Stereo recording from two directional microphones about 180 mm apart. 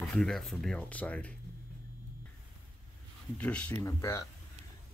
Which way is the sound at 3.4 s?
5° left (ahead or behind).